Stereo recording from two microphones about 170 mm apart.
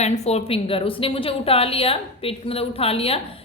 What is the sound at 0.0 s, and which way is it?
A woman's voice, 40° left (ahead or behind).